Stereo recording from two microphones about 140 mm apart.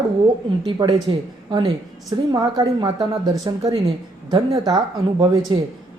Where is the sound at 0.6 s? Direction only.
35° right (ahead or behind).